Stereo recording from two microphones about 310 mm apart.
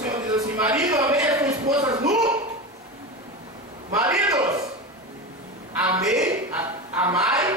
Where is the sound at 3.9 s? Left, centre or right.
Centre.